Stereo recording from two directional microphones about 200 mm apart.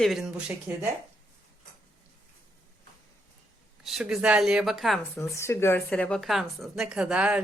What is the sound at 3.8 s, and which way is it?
Speech, centre (ahead or behind).